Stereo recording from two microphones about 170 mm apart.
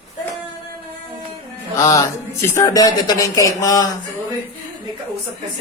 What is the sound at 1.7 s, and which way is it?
Music, 20° left (ahead or behind).